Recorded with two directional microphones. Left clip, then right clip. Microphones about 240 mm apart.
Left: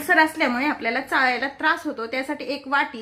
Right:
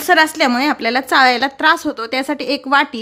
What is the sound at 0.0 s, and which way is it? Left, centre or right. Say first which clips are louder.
A woman's voice: right 6 dB; right.